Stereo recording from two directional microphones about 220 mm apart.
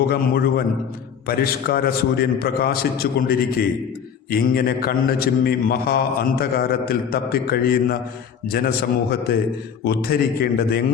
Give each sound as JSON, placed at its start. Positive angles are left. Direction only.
{"t": 0.1, "sound": "a man's voice", "side_deg": 45}